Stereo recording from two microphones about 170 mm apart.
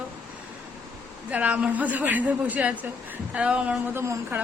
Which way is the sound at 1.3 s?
10° right (ahead or behind).